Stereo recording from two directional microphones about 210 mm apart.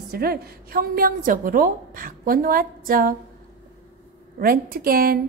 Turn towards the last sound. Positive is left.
turn(degrees=-45)  # may be behind; listen again after turning